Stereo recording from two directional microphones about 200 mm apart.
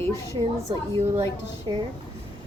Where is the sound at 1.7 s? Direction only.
20° right (ahead or behind).